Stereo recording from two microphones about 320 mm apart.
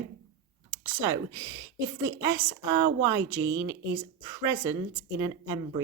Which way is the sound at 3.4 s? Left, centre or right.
Right.